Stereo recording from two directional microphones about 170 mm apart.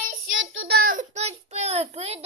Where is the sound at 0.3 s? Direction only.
90° right.